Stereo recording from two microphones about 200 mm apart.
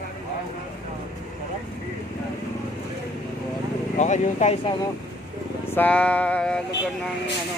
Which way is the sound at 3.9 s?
35° left (ahead or behind).